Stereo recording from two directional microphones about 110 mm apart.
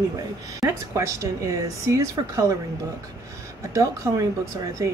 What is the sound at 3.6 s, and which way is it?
Speech, 30° right (ahead or behind).